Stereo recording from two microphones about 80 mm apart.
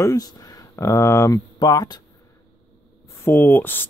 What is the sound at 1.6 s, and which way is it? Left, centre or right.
Speech, left.